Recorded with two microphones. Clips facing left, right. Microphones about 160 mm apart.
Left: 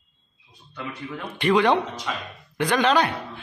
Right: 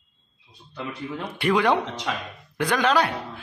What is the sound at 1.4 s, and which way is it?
Speech, 5° right (ahead or behind).